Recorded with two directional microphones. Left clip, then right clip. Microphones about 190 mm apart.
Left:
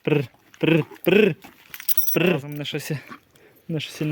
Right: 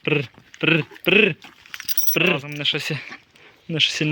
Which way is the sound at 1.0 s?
20° left (ahead or behind).